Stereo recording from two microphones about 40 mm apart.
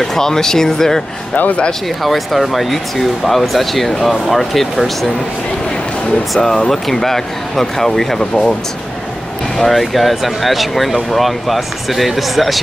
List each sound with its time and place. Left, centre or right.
0.0 s speech: centre
1.3 s speech: left
2.0 s speech: centre
6.3 s speech: centre
9.6 s speech: centre